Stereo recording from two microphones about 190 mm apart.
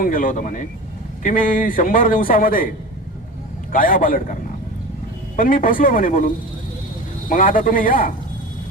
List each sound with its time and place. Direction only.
0.0 s a man's voice: 45° left (ahead or behind)
3.7 s a man's voice: 45° left (ahead or behind)
5.4 s a man's voice: 45° left (ahead or behind)